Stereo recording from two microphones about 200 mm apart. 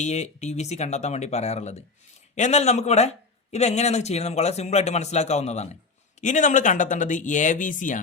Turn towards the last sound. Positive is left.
turn(degrees=40)  # may be behind; listen again after turning